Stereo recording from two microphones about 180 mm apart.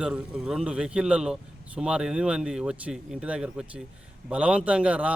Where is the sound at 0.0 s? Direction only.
5° right (ahead or behind).